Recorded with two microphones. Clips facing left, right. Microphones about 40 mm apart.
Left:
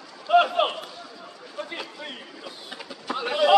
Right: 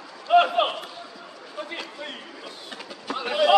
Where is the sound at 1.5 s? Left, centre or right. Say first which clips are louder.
Even; centre.